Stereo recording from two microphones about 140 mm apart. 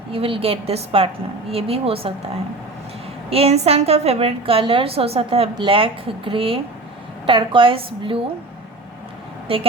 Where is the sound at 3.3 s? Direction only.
45° right (ahead or behind).